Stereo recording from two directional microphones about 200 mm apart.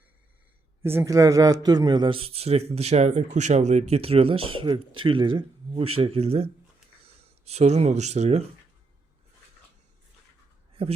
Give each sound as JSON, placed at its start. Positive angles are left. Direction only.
{"t": 0.8, "sound": "a man's voice", "side_deg": -10}